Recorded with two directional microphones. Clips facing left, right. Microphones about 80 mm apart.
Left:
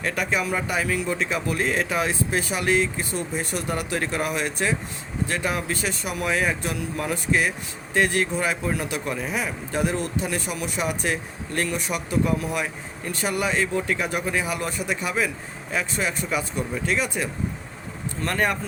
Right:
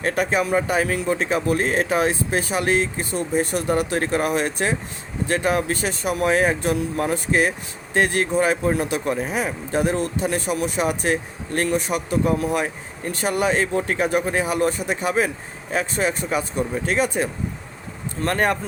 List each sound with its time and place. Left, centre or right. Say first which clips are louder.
0.0 s speech: right 4 dB; right